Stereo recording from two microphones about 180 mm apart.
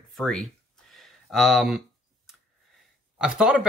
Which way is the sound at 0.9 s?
Centre (ahead or behind).